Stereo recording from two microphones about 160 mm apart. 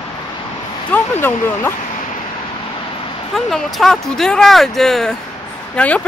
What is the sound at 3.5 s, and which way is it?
A woman's voice, centre (ahead or behind).